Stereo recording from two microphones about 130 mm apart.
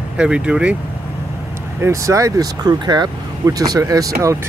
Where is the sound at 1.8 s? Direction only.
25° right (ahead or behind).